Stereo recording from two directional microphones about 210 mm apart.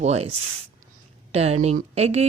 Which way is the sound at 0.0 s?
30° right (ahead or behind).